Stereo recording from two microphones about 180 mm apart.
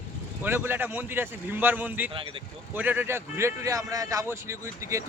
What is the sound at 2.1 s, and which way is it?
Speech, 30° right (ahead or behind).